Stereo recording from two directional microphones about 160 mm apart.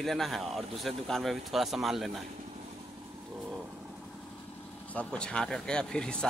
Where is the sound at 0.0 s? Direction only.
Centre (ahead or behind).